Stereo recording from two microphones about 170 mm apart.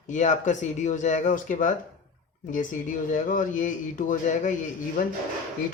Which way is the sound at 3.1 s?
50° left (ahead or behind).